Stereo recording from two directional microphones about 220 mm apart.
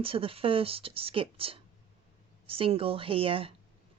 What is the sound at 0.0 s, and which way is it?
Speech, 25° right (ahead or behind).